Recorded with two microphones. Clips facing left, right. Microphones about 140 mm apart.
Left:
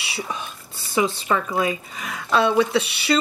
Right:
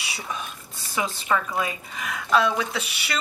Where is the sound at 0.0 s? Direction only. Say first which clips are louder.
Left 3 dB; 30° left (ahead or behind).